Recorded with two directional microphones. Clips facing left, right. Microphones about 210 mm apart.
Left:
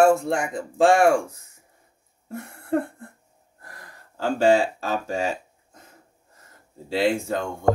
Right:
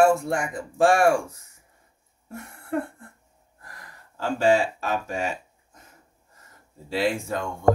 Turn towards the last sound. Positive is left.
turn(degrees=30)  # may be behind; listen again after turning